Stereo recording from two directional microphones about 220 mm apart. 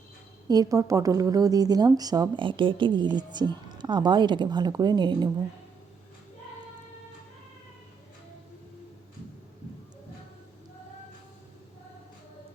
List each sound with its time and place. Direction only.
0.4 s a woman's voice: 15° right (ahead or behind)